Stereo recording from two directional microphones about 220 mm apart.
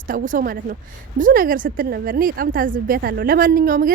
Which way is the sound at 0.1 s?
40° right (ahead or behind).